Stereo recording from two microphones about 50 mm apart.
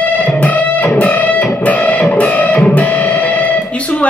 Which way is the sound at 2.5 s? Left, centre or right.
Left.